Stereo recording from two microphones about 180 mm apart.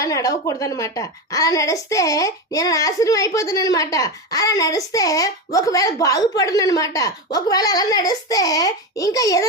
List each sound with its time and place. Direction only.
0.0 s a woman's voice: 20° left (ahead or behind)